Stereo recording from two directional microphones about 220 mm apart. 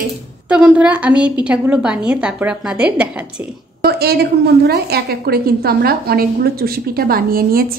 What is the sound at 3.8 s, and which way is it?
A woman's voice, 45° right (ahead or behind).